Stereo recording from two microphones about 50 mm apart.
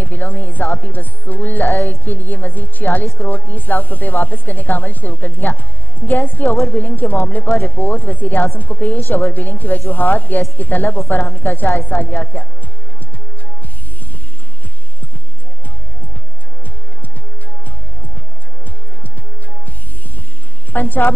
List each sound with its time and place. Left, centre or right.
0.0 s a woman's voice: left
20.7 s a woman's voice: left